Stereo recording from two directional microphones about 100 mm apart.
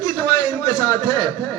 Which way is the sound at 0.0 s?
40° left (ahead or behind).